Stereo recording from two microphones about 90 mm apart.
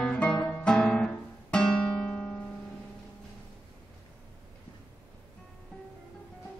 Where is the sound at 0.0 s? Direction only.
10° left (ahead or behind).